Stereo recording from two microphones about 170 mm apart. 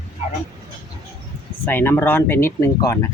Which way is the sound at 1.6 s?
10° left (ahead or behind).